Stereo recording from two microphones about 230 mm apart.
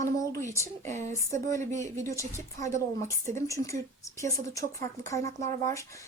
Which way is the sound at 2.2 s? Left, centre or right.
Centre.